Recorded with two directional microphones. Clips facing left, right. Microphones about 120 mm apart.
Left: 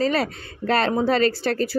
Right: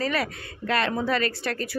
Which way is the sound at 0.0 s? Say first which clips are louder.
Left 5 dB; 30° left (ahead or behind).